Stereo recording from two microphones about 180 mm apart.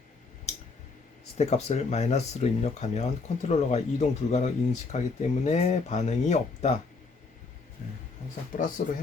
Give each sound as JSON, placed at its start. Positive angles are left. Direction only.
{"t": 1.4, "sound": "speech", "side_deg": 40}
{"t": 8.5, "sound": "speech", "side_deg": 45}